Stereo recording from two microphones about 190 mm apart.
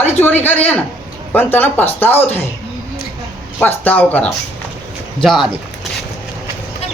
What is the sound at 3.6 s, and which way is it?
Speech, 10° left (ahead or behind).